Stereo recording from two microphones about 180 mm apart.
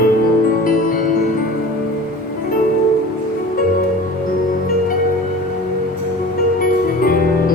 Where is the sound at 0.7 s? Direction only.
50° left (ahead or behind).